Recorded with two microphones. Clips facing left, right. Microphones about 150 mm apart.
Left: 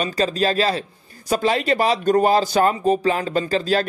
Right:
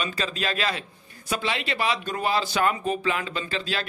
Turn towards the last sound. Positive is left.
turn(degrees=40)  # may be behind; listen again after turning